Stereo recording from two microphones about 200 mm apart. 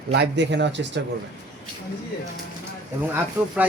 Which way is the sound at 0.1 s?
60° right (ahead or behind).